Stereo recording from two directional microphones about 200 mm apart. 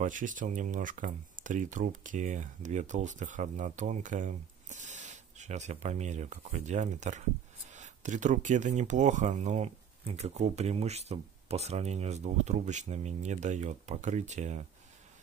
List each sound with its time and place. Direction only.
0.0 s speech: 40° right (ahead or behind)